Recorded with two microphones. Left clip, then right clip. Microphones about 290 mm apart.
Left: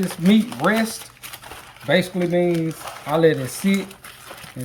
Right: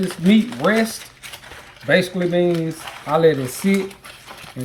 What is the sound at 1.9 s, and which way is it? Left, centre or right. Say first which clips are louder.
Speech: right 2 dB; centre.